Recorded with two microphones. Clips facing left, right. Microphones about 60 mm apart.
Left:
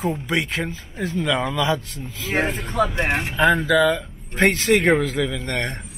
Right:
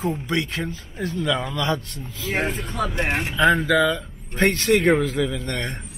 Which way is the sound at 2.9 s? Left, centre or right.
Centre.